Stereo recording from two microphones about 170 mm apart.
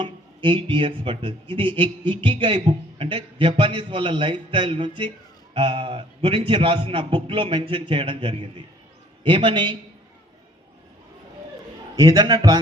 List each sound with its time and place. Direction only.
0.0 s a man's voice: 30° right (ahead or behind)
11.9 s a man's voice: 25° right (ahead or behind)